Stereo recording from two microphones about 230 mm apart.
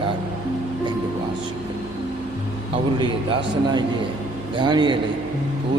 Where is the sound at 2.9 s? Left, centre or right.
Centre.